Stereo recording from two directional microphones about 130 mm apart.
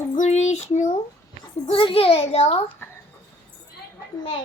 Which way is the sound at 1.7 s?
45° left (ahead or behind).